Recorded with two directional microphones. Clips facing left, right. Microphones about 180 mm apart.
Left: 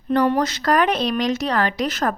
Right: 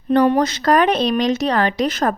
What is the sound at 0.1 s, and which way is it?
A woman's voice, 20° right (ahead or behind).